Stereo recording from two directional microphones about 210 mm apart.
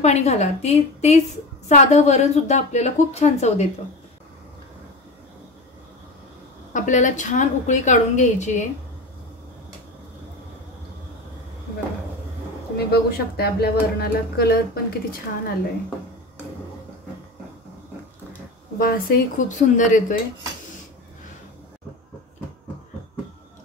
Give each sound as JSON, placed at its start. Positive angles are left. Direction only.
{"t": 0.0, "sound": "a woman's voice", "side_deg": 30}
{"t": 6.7, "sound": "a woman's voice", "side_deg": 35}
{"t": 12.7, "sound": "speech", "side_deg": 50}
{"t": 18.8, "sound": "a woman's voice", "side_deg": 45}